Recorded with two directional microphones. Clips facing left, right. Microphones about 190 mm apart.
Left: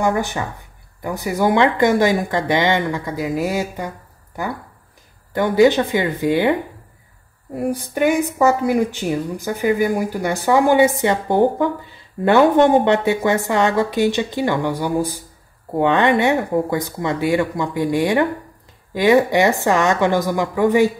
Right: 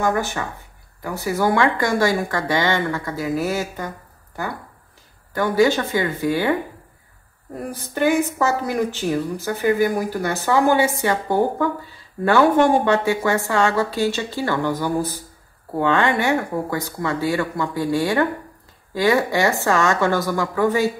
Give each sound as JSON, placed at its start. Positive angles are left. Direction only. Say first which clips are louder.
{"t": 0.0, "sound": "a woman's voice", "louder": "left 2 dB", "side_deg": 15}
{"t": 5.3, "sound": "speech", "louder": "left 4 dB", "side_deg": 20}
{"t": 7.7, "sound": "a woman's voice", "louder": "even", "side_deg": 15}